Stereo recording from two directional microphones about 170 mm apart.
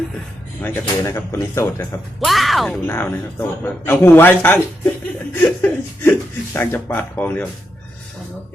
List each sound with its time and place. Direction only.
0.6 s speech: 15° left (ahead or behind)
2.2 s speech: centre (ahead or behind)
2.8 s speech: 10° left (ahead or behind)